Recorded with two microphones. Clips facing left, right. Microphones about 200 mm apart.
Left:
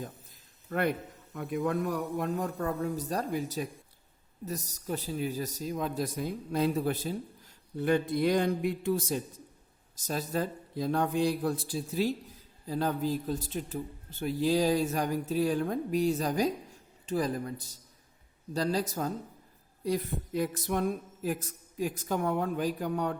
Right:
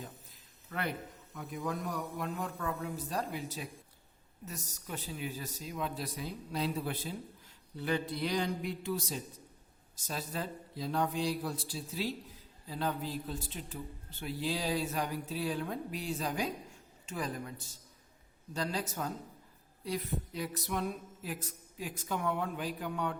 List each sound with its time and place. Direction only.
0.7 s speech: 50° left (ahead or behind)